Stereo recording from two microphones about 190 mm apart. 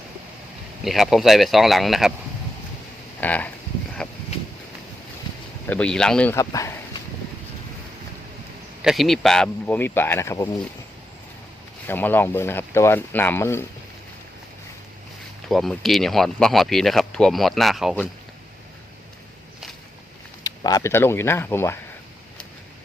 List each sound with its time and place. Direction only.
0.9 s speech: centre (ahead or behind)
3.2 s a sound: 10° left (ahead or behind)
5.6 s speech: 5° left (ahead or behind)
6.3 s speech: 15° left (ahead or behind)
8.8 s speech: centre (ahead or behind); by 10.5 s 15° left (ahead or behind)
11.9 s speech: 10° left (ahead or behind)
15.4 s speech: centre (ahead or behind)
20.4 s speech: 20° left (ahead or behind)